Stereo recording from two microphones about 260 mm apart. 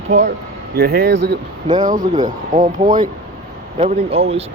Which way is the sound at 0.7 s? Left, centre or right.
Right.